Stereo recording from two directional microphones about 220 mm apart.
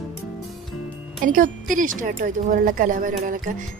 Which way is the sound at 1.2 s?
40° right (ahead or behind).